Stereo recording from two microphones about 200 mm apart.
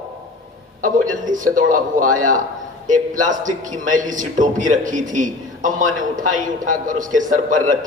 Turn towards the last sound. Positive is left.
turn(degrees=-40)  # may be behind; listen again after turning